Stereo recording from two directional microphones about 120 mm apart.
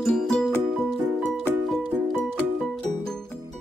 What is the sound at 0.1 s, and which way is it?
Music, 5° left (ahead or behind).